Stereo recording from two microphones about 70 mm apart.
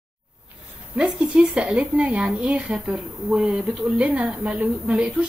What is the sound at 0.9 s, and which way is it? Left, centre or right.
Speech, centre.